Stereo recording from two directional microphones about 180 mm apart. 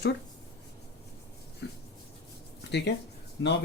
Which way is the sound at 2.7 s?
70° left (ahead or behind).